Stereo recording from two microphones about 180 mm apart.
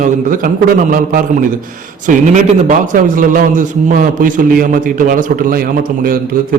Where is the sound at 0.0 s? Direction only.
50° right (ahead or behind).